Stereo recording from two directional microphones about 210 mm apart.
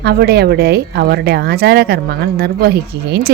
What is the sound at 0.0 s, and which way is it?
Speech, 50° right (ahead or behind).